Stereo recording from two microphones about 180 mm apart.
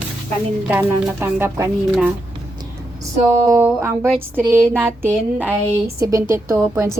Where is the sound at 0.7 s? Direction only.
10° right (ahead or behind).